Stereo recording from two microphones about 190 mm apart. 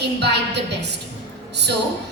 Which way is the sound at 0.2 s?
65° right (ahead or behind).